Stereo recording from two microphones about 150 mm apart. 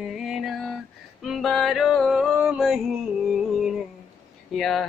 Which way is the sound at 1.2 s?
Centre (ahead or behind).